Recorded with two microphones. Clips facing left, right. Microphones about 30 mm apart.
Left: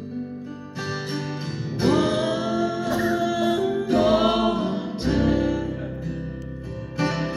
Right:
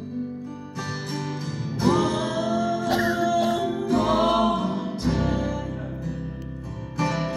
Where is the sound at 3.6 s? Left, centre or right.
Left.